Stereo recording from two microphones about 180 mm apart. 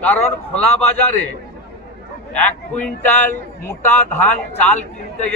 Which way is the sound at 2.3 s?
10° left (ahead or behind).